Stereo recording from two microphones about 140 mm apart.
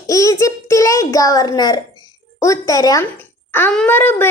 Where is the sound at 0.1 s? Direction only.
25° left (ahead or behind).